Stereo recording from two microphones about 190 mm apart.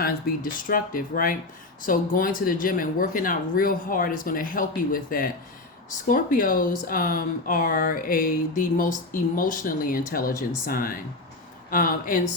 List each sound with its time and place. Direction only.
0.0 s speech: 45° left (ahead or behind)